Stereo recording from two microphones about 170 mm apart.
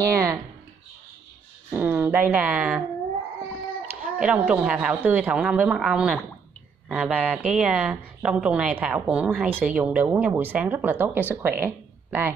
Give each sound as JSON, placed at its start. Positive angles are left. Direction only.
{"t": 0.0, "sound": "speech", "side_deg": -20}
{"t": 1.7, "sound": "speech", "side_deg": -10}
{"t": 3.8, "sound": "a woman's voice", "side_deg": -10}
{"t": 11.6, "sound": "a sound", "side_deg": -10}